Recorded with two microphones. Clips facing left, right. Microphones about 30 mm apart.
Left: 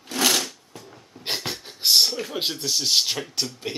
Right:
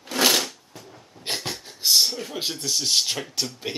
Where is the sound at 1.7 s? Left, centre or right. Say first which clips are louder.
Left 1 dB; left.